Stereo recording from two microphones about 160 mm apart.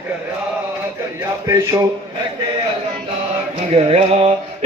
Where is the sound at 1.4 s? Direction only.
20° right (ahead or behind).